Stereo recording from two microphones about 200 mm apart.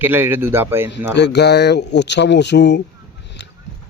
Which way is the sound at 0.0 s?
10° right (ahead or behind).